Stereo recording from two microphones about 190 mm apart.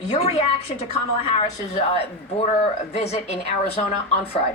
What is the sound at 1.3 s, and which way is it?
A woman's voice, 35° left (ahead or behind).